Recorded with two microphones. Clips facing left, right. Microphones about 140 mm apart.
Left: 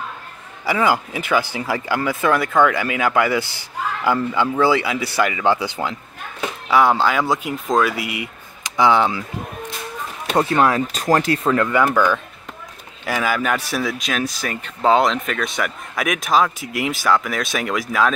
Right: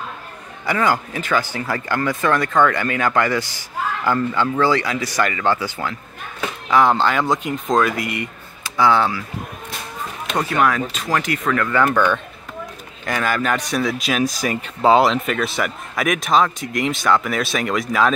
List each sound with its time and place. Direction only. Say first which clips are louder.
0.7 s speech: left 1 dB; 10° left (ahead or behind)
8.6 s speech: left 1 dB; 15° left (ahead or behind)
10.3 s speech: left 2 dB; 30° left (ahead or behind)
11.7 s speech: even; 5° left (ahead or behind)